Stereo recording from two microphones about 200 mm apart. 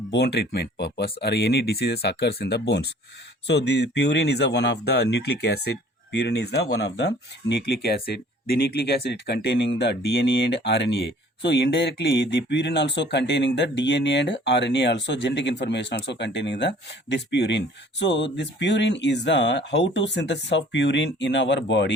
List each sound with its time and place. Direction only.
0.1 s speech: 55° left (ahead or behind)